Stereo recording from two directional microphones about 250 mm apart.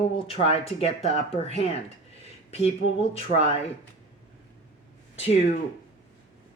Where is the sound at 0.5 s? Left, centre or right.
Left.